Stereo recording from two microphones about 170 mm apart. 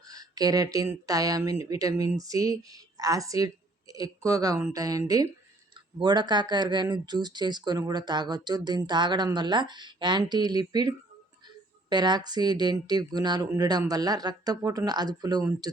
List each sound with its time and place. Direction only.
0.1 s speech: 20° right (ahead or behind)